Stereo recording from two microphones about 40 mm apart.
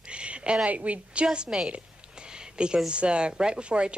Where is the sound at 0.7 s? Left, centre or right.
Right.